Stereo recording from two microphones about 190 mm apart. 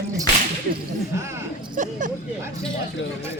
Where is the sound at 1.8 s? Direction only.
40° right (ahead or behind).